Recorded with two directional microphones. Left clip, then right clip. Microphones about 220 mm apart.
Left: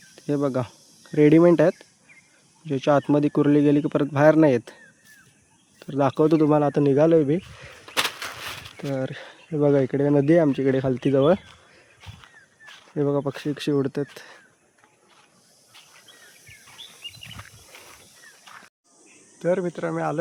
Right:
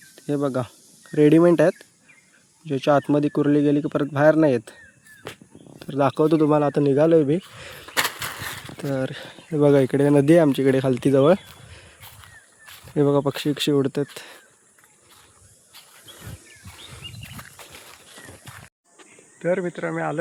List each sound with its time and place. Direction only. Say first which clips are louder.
0.2 s speech: even; centre (ahead or behind)
5.8 s speech: right 1 dB; 5° right (ahead or behind)
8.4 s a sound: right 2 dB; 10° right (ahead or behind)
9.5 s speech: right 3 dB; 10° right (ahead or behind)
18.5 s a sound: left 2 dB; 15° right (ahead or behind)
19.4 s speech: even; 10° left (ahead or behind)